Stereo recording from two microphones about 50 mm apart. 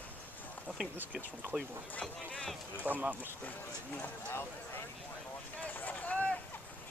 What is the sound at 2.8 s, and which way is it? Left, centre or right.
Speech, right.